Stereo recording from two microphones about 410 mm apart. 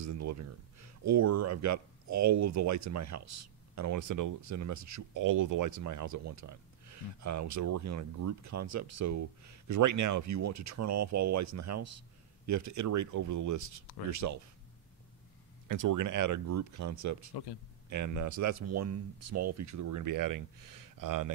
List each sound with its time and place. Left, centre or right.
0.0 s speech: right
15.7 s speech: right
17.3 s a man's voice: left
17.8 s speech: right